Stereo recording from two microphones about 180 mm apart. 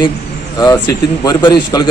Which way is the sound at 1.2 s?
25° left (ahead or behind).